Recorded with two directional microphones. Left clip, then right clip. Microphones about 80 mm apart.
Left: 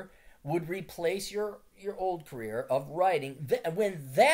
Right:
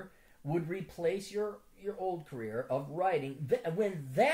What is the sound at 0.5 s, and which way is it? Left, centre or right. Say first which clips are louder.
Speech: left 3 dB; left.